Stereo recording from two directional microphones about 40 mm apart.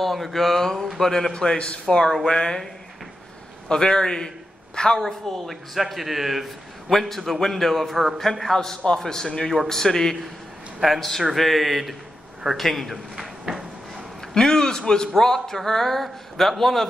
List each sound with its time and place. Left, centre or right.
0.0 s a man's voice: centre
1.3 s a man's voice: left
3.6 s speech: centre
5.0 s a man's voice: centre
10.8 s a man's voice: centre
13.1 s drawer open or close: centre
14.3 s speech: centre